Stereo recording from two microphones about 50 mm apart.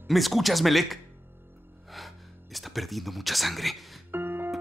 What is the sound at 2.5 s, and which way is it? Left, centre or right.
Speech, centre.